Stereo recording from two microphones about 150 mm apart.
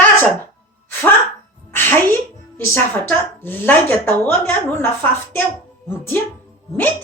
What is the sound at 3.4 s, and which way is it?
A woman's voice, 15° left (ahead or behind).